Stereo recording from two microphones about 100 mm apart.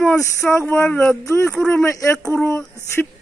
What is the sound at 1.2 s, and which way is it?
Speech, 30° left (ahead or behind).